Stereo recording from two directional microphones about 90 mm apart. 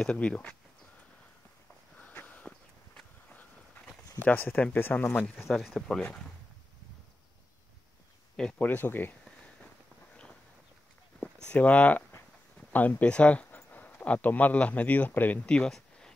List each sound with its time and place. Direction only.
0.0 s speech: 10° left (ahead or behind)
2.0 s a sound: 15° left (ahead or behind)
4.2 s speech: 20° left (ahead or behind)
5.5 s speech: centre (ahead or behind)
8.4 s speech: 10° left (ahead or behind)
8.6 s speech: 20° left (ahead or behind)
11.1 s speech: 10° left (ahead or behind)